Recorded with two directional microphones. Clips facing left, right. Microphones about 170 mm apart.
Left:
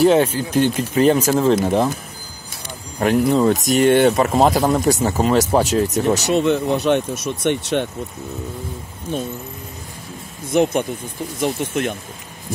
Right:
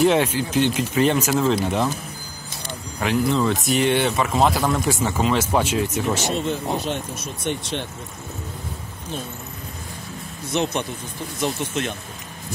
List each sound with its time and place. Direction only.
0.0 s speech: 35° left (ahead or behind)
0.4 s speech: 50° left (ahead or behind)
0.9 s speech: 35° left (ahead or behind)
3.0 s speech: 45° left (ahead or behind)
6.3 s speech: 70° left (ahead or behind)
10.5 s speech: 50° left (ahead or behind)